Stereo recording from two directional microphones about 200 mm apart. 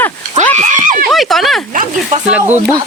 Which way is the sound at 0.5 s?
40° right (ahead or behind).